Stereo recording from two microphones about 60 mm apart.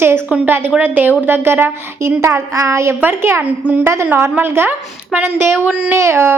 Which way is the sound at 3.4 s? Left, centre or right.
Right.